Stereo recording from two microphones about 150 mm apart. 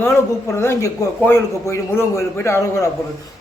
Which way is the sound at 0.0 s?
15° left (ahead or behind).